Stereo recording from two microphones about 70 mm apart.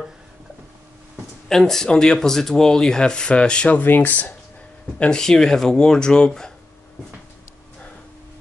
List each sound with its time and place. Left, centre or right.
1.5 s speech: centre
3.8 s speech: left
4.9 s speech: centre